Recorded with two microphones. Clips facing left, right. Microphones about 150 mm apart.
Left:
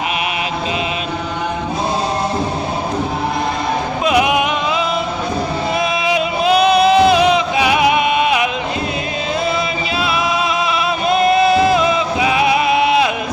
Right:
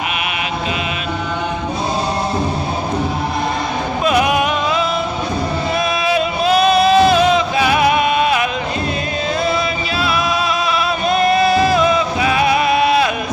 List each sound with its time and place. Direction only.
4.0 s a sound: 15° left (ahead or behind)
6.0 s music: 15° left (ahead or behind)
11.1 s music: 20° left (ahead or behind)